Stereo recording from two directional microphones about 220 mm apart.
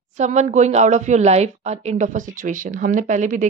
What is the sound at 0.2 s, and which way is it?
A woman's voice, 30° right (ahead or behind).